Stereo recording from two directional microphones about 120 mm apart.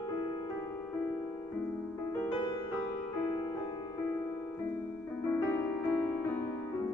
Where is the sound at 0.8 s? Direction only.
10° left (ahead or behind).